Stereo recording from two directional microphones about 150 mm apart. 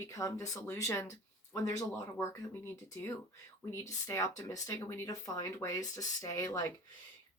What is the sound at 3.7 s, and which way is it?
Speech, 20° left (ahead or behind).